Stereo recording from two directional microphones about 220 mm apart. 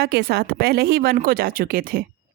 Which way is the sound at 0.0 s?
45° right (ahead or behind).